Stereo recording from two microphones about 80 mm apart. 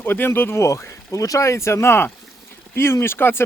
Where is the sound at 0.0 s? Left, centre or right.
Left.